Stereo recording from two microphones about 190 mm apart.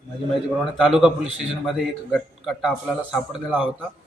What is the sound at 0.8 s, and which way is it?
Speech, centre (ahead or behind).